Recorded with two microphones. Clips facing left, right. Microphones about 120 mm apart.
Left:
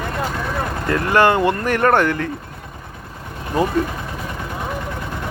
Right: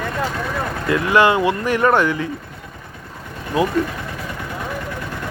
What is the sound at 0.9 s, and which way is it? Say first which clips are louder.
Speech: even; 50° left (ahead or behind).